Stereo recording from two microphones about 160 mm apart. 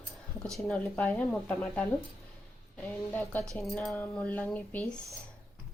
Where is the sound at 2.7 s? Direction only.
15° left (ahead or behind).